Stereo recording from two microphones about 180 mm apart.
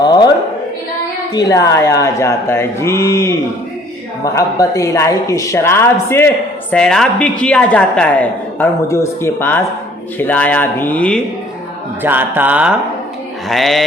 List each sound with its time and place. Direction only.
0.0 s choir: 25° left (ahead or behind)
1.3 s speech: 20° left (ahead or behind)
4.4 s speech: 15° left (ahead or behind)
12.0 s speech: 10° right (ahead or behind)
13.5 s a sound: centre (ahead or behind)